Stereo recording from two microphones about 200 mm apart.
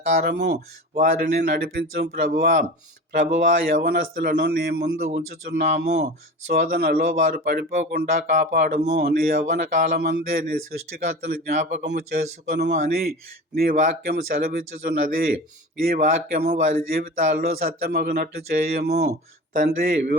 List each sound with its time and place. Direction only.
0.2 s speech: 55° right (ahead or behind); by 11.9 s 40° right (ahead or behind)
12.9 s speech: 50° right (ahead or behind)